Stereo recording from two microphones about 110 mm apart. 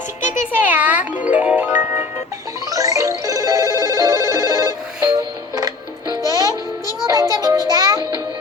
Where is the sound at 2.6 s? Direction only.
30° right (ahead or behind).